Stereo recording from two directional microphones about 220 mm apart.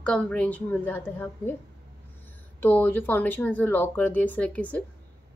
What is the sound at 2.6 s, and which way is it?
A woman's voice, 10° left (ahead or behind).